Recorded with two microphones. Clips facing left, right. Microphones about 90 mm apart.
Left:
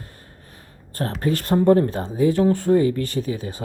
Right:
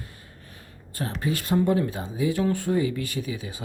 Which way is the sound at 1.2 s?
45° left (ahead or behind).